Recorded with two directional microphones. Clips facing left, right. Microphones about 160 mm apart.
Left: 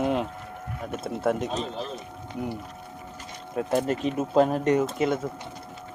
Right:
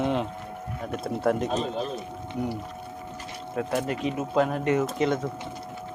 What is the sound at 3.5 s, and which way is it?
Speech, 35° left (ahead or behind).